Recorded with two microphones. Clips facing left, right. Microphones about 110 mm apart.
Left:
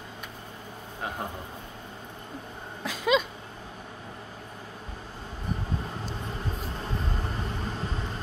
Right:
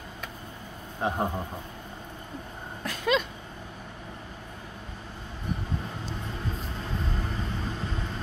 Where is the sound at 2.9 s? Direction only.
10° left (ahead or behind).